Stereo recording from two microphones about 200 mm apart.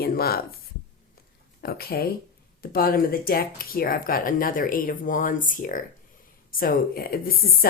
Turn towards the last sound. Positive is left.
turn(degrees=45)  # may be behind; listen again after turning